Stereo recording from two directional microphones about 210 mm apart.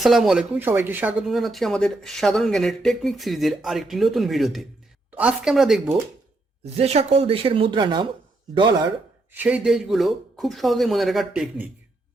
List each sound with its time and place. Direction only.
0.0 s speech: centre (ahead or behind)
6.7 s speech: 30° right (ahead or behind)
9.3 s speech: 5° right (ahead or behind)